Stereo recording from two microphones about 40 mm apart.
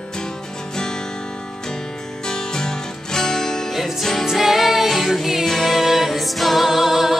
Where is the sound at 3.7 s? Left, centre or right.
Centre.